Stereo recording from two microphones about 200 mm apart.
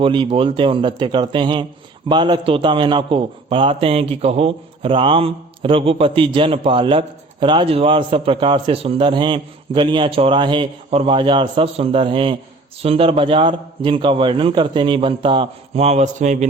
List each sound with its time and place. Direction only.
0.0 s a man's voice: 25° right (ahead or behind)